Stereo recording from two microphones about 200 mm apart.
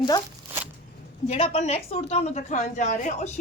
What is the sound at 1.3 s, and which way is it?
A woman's voice, 30° left (ahead or behind).